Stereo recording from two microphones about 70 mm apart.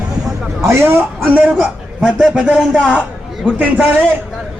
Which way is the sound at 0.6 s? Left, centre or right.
Right.